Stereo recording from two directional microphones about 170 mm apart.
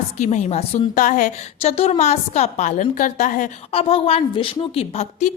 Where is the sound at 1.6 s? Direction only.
35° left (ahead or behind).